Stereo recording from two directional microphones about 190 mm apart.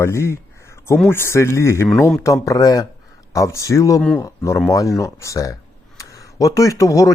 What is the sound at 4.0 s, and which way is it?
Speech, 5° left (ahead or behind).